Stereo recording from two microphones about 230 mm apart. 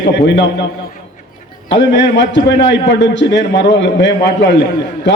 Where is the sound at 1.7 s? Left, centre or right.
Left.